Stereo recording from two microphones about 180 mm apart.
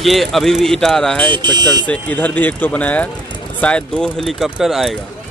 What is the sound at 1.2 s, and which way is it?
Speech, 25° right (ahead or behind).